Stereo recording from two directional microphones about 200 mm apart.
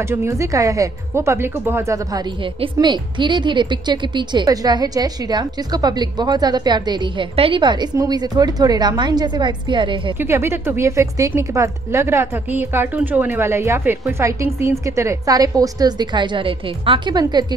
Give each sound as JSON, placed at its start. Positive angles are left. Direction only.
{"t": 0.0, "sound": "a woman's voice", "side_deg": -10}
{"t": 10.1, "sound": "a woman's voice", "side_deg": -10}